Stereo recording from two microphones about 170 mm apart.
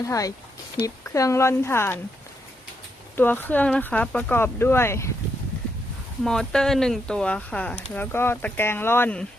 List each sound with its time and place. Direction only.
0.0 s speech: 20° left (ahead or behind)
3.2 s speech: 10° left (ahead or behind)
6.2 s speech: 5° left (ahead or behind)